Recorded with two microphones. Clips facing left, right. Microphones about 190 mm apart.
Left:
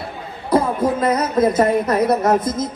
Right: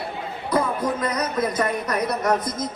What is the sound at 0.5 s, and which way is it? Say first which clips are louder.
Speech: left 6 dB; 25° left (ahead or behind).